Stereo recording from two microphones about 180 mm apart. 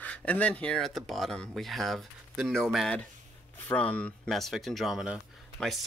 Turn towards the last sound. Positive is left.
turn(degrees=0)  # may be behind; listen again after turning